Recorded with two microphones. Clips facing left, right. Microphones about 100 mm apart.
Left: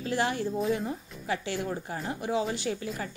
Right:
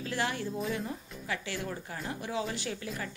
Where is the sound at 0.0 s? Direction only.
30° left (ahead or behind).